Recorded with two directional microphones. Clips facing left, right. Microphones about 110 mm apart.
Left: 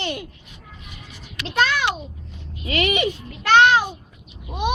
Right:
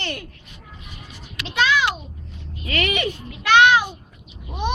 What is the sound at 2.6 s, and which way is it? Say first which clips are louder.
Speech: left 2 dB; 25° left (ahead or behind).